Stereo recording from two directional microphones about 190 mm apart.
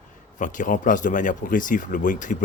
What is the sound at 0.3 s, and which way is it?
Speech, 40° left (ahead or behind).